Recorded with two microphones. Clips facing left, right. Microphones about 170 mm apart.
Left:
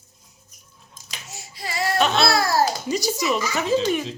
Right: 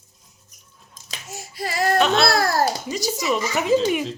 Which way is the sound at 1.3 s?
55° right (ahead or behind).